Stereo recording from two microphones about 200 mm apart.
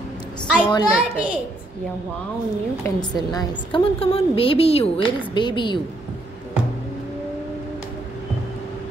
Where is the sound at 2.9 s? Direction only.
20° left (ahead or behind).